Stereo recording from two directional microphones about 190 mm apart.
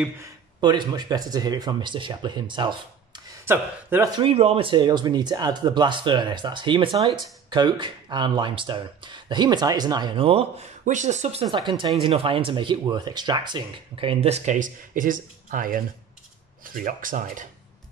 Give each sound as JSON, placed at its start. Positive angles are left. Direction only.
{"t": 0.2, "sound": "speech", "side_deg": -20}
{"t": 4.2, "sound": "speech", "side_deg": -30}
{"t": 10.9, "sound": "speech", "side_deg": -40}
{"t": 11.4, "sound": "speech", "side_deg": -25}